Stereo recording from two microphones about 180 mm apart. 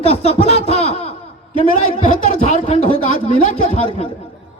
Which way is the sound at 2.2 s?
40° left (ahead or behind).